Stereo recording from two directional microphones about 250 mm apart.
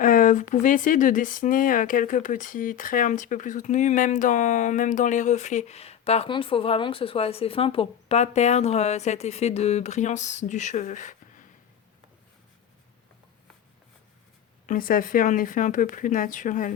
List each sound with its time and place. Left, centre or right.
0.0 s speech: left
14.7 s speech: left